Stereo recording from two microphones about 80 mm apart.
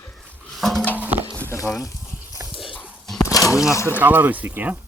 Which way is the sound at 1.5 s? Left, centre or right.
Left.